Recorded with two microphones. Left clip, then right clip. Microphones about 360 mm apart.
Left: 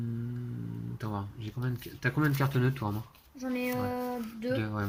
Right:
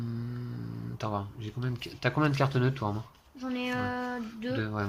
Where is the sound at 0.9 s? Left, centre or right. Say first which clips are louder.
Right 6 dB; centre.